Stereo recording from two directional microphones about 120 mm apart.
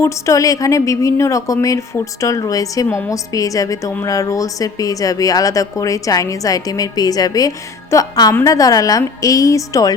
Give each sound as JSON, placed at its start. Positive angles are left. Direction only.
{"t": 0.0, "sound": "speech", "side_deg": 25}